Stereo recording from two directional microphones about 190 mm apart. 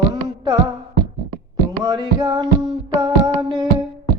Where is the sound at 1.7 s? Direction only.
20° right (ahead or behind).